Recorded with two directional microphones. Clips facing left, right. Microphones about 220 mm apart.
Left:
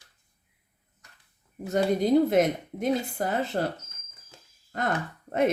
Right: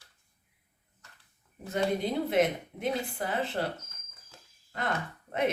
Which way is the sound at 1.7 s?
40° left (ahead or behind).